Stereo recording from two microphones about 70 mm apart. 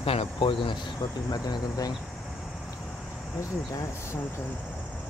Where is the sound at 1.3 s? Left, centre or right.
Left.